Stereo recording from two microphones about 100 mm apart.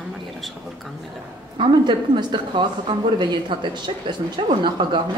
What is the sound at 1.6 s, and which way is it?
A woman's voice, 50° right (ahead or behind).